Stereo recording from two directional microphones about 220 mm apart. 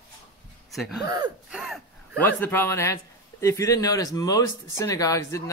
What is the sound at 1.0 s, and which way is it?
Speech, 20° right (ahead or behind).